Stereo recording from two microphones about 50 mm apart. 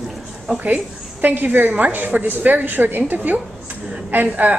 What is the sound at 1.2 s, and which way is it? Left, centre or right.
A woman's voice, right.